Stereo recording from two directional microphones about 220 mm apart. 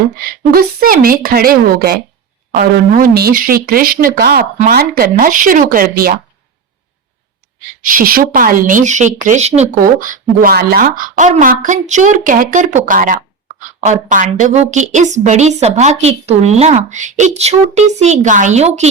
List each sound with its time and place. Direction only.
0.2 s speech: 45° right (ahead or behind)
7.9 s speech: 40° right (ahead or behind)